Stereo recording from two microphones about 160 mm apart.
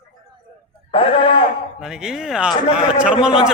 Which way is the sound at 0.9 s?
35° left (ahead or behind).